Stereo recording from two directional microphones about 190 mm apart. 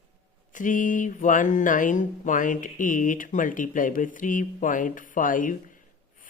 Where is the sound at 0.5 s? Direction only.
45° left (ahead or behind).